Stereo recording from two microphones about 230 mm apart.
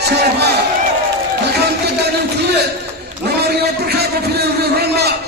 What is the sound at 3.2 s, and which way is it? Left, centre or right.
A man's voice, right.